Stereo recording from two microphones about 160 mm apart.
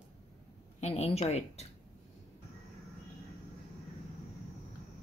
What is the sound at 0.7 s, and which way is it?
Speech, 45° left (ahead or behind).